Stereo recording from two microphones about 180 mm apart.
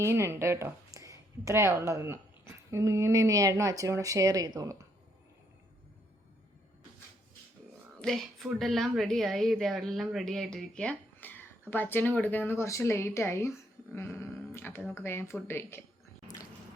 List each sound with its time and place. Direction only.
0.0 s speech: 15° right (ahead or behind)
8.0 s speech: centre (ahead or behind)
16.2 s squish: 20° left (ahead or behind)